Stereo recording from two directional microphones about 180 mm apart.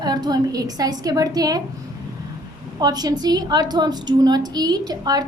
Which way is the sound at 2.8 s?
20° right (ahead or behind).